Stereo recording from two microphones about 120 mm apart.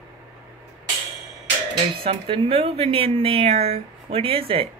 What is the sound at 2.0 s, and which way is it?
Speech, 50° right (ahead or behind).